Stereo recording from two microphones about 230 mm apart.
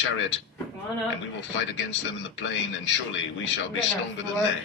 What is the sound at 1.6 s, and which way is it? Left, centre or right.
Speech, left.